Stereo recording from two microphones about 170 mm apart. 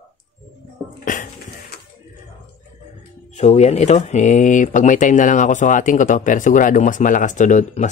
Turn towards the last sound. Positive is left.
turn(degrees=45)  # may be behind; listen again after turning